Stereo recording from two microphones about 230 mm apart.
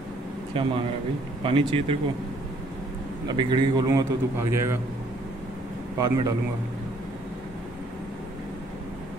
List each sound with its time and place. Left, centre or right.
0.5 s speech: right
3.3 s a man's voice: right
5.9 s a man's voice: centre